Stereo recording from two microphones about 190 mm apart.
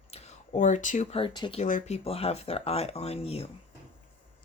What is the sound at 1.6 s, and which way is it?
Speech, 40° left (ahead or behind).